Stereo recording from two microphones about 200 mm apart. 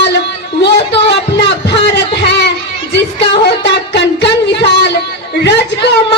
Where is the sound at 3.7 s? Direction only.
60° left (ahead or behind).